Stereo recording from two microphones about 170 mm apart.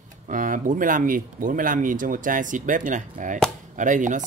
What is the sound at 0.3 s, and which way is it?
Speech, 50° right (ahead or behind).